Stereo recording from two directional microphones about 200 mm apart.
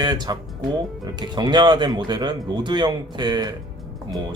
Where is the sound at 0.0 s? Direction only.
20° right (ahead or behind).